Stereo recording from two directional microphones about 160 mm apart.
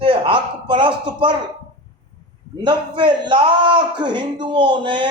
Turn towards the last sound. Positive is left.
turn(degrees=-30)  # may be behind; listen again after turning